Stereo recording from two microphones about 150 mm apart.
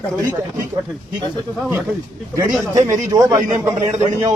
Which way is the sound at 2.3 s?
20° right (ahead or behind).